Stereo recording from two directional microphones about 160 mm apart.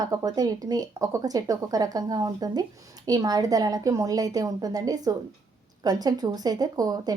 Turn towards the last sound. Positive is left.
turn(degrees=-25)  # may be behind; listen again after turning